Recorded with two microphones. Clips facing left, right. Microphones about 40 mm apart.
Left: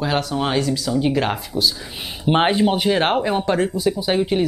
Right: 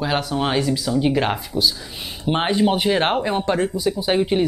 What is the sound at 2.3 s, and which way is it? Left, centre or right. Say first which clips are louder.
Speech: left 3 dB; centre.